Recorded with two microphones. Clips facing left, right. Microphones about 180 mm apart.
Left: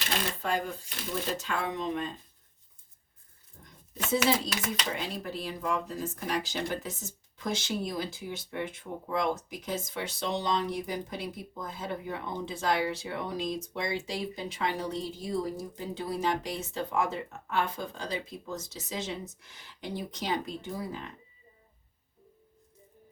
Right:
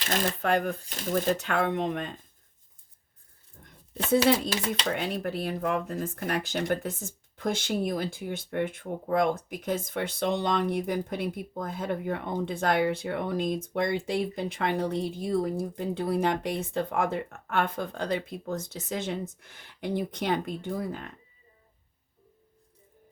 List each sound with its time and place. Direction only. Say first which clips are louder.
0.4 s speech: right 6 dB; 60° right (ahead or behind)
0.9 s speech: right 7 dB; 50° right (ahead or behind)
4.2 s speech: right 3 dB; 30° right (ahead or behind)
4.9 s speech: right 5 dB; 60° right (ahead or behind)